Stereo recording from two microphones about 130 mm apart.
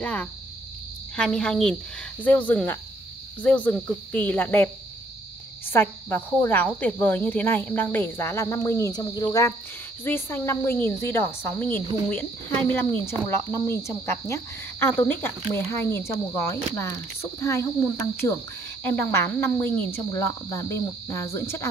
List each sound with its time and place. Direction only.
0.0 s a woman's voice: 10° left (ahead or behind)
5.7 s speech: 15° left (ahead or behind)
10.0 s speech: 15° left (ahead or behind)